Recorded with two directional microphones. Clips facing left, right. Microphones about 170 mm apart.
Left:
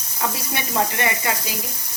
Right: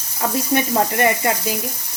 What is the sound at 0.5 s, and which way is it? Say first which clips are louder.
Speech: right 6 dB; 45° right (ahead or behind).